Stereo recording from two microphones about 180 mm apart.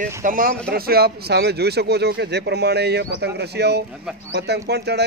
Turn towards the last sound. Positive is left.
turn(degrees=-65)  # may be behind; listen again after turning